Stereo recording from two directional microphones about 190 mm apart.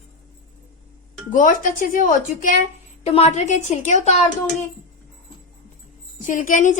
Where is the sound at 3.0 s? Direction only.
30° left (ahead or behind).